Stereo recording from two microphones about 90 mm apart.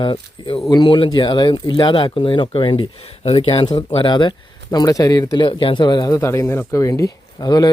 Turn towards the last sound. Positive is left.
turn(degrees=50)  # may be behind; listen again after turning